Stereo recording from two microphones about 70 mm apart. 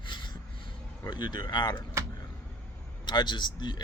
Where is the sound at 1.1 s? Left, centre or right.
Left.